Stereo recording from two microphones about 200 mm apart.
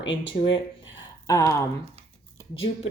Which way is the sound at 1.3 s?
15° left (ahead or behind).